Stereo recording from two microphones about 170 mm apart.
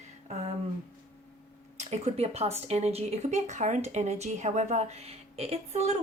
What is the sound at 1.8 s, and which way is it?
Speech, 45° right (ahead or behind).